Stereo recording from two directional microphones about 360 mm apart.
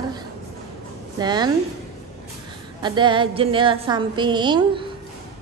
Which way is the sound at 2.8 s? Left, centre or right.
Centre.